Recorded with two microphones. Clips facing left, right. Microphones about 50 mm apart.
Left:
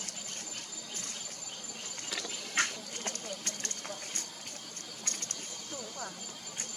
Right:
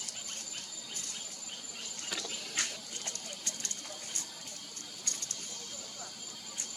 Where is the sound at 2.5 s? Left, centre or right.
Left.